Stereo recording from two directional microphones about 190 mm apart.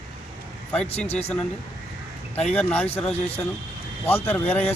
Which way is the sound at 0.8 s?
30° left (ahead or behind).